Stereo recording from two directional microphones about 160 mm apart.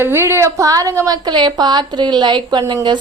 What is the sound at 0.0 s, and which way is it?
A woman's voice, 15° right (ahead or behind).